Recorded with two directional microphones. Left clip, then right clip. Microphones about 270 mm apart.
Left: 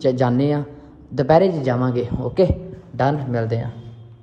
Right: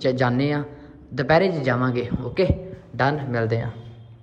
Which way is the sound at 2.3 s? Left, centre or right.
Centre.